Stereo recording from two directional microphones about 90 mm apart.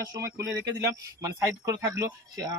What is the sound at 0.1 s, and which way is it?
Speech, 35° right (ahead or behind).